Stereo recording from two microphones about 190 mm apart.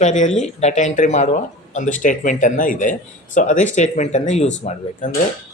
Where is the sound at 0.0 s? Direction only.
40° left (ahead or behind).